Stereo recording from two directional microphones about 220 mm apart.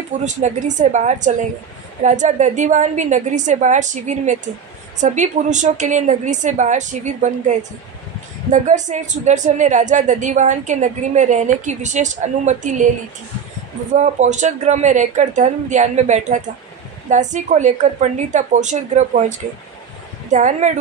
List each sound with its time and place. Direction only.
0.2 s a woman's voice: 35° right (ahead or behind)
13.9 s a woman's voice: 30° right (ahead or behind)